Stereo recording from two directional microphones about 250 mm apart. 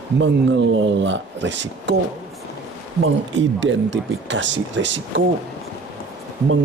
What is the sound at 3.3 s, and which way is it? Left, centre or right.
Speech, right.